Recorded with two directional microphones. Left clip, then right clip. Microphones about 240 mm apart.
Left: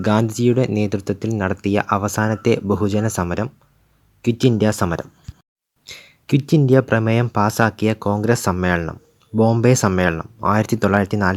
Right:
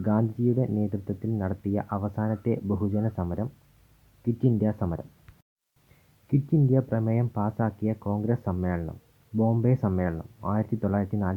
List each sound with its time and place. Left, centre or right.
0.0 s speech: left
6.2 s speech: left